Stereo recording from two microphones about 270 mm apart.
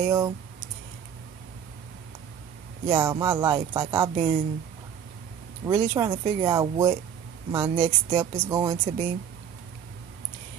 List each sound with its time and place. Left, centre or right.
0.0 s speech: centre
2.9 s speech: centre
5.7 s speech: centre